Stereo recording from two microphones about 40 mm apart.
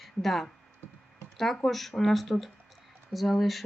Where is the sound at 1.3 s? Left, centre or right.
Centre.